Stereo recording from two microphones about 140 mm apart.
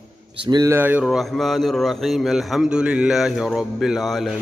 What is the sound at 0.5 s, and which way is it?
Speech, 25° right (ahead or behind).